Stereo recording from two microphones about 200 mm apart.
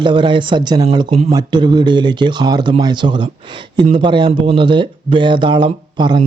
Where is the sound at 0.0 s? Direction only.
25° right (ahead or behind).